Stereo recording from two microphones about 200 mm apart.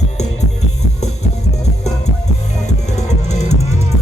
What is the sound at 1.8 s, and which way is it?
Music, 35° left (ahead or behind).